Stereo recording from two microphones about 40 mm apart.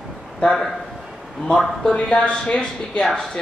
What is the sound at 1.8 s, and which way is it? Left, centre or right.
Speech, left.